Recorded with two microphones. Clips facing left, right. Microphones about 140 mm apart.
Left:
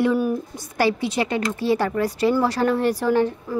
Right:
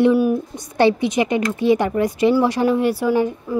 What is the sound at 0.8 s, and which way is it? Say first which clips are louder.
Speech: right 5 dB; 20° right (ahead or behind).